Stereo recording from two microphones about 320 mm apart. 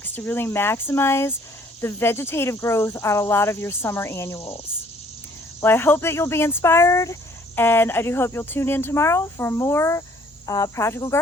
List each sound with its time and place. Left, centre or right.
0.0 s speech: centre
5.5 s speech: centre